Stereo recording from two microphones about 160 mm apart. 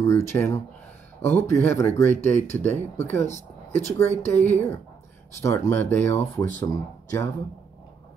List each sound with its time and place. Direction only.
0.0 s speech: 15° left (ahead or behind)